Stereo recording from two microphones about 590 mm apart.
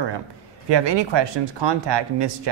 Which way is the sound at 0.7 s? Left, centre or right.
Right.